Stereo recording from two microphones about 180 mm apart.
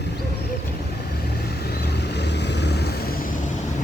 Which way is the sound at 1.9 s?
70° left (ahead or behind).